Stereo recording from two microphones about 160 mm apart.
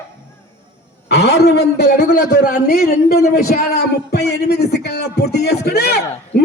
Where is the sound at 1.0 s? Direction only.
90° left.